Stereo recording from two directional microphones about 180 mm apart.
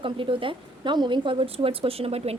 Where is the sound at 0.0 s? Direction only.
30° right (ahead or behind).